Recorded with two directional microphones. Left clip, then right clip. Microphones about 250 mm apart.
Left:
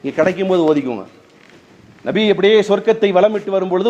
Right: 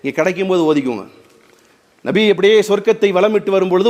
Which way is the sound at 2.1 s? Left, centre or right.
Right.